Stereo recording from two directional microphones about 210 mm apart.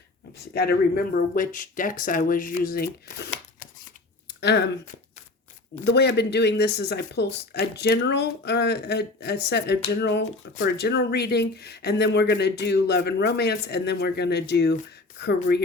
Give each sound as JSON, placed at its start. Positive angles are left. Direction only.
{"t": 0.5, "sound": "speech", "side_deg": 50}
{"t": 4.3, "sound": "a sound", "side_deg": 55}
{"t": 5.8, "sound": "speech", "side_deg": 50}